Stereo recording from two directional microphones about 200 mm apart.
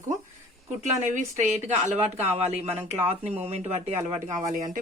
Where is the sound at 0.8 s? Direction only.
35° right (ahead or behind).